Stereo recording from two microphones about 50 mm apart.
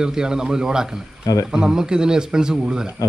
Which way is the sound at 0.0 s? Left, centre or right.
Centre.